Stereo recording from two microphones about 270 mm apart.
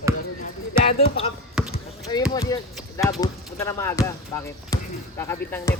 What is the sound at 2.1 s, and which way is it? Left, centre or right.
Speech, centre.